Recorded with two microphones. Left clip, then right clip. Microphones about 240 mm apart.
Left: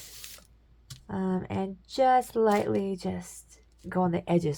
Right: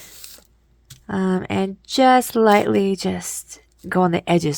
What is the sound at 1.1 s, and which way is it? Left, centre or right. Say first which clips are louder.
A woman's voice: right 10 dB; right.